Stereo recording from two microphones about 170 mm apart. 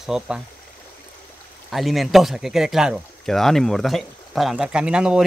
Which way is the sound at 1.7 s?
Centre (ahead or behind).